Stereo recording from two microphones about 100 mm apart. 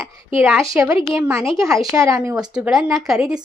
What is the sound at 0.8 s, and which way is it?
A woman's voice, 35° right (ahead or behind).